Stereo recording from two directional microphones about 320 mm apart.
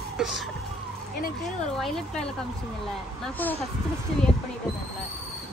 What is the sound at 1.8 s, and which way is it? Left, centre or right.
Speech, centre.